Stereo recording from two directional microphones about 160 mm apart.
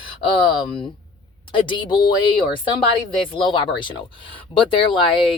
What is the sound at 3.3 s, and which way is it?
Speech, 30° left (ahead or behind).